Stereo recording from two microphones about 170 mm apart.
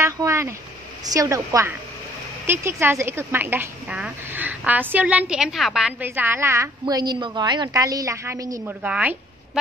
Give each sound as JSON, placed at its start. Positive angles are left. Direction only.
{"t": 0.0, "sound": "vehicle", "side_deg": -15}
{"t": 1.0, "sound": "a woman's voice", "side_deg": -20}
{"t": 8.8, "sound": "a woman's voice", "side_deg": -5}